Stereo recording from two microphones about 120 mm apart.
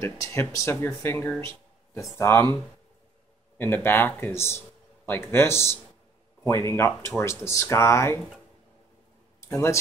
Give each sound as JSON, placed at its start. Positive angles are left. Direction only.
{"t": 0.0, "sound": "speech", "side_deg": 20}
{"t": 3.5, "sound": "speech", "side_deg": 20}